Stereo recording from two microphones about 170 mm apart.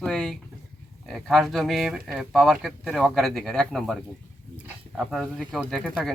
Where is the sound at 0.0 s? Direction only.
5° left (ahead or behind).